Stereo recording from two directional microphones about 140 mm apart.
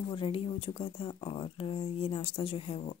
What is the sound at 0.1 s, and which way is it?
Speech, 40° left (ahead or behind).